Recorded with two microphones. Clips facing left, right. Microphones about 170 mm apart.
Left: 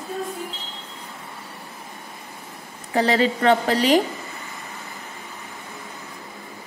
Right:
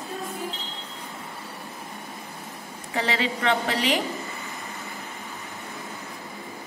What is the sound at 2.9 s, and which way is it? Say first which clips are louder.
A woman's voice: left 7 dB; 40° left (ahead or behind).